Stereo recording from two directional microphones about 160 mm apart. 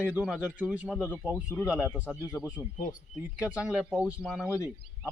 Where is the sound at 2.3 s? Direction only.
Centre (ahead or behind).